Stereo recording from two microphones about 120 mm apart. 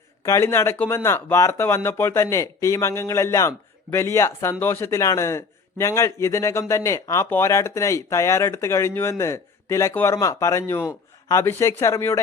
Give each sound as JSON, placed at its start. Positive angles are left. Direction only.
{"t": 0.2, "sound": "a man's voice", "side_deg": 25}